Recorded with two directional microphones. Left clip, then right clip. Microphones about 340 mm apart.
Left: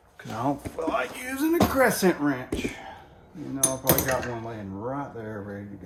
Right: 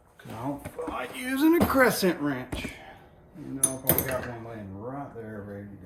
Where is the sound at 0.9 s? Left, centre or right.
Centre.